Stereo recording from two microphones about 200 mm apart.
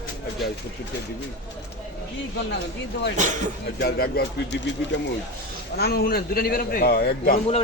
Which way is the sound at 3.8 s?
55° left (ahead or behind).